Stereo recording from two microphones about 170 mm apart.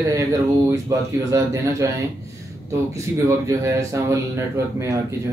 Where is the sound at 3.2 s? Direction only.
20° right (ahead or behind).